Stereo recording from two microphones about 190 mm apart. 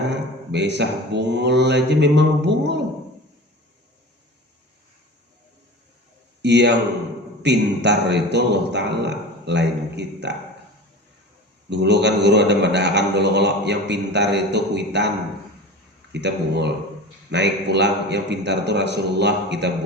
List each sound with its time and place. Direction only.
0.1 s a man's voice: 65° right (ahead or behind)
6.4 s a man's voice: 65° right (ahead or behind)
11.7 s a man's voice: 65° right (ahead or behind)
16.1 s a man's voice: 65° right (ahead or behind)